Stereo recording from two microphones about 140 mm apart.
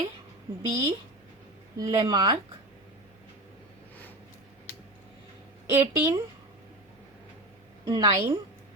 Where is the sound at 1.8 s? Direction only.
30° right (ahead or behind).